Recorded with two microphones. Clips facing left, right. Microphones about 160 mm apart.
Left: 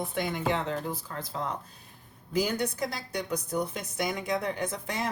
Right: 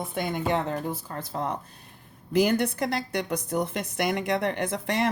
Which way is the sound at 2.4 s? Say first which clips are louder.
Right 6 dB; 65° right (ahead or behind).